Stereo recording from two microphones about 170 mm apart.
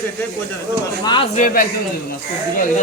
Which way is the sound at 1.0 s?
25° left (ahead or behind).